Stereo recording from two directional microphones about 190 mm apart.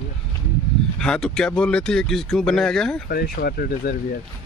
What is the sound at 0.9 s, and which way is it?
Speech, 5° left (ahead or behind).